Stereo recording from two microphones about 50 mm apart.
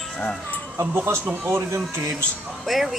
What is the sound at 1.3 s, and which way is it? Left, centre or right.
Speech, right.